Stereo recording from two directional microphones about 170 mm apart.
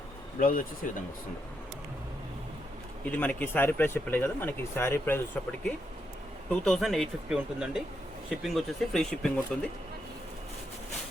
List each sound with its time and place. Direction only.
0.3 s speech: 55° left (ahead or behind)
3.0 s speech: 10° left (ahead or behind)